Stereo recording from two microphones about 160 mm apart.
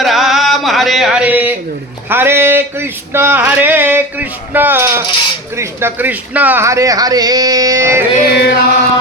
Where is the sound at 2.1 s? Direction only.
15° right (ahead or behind).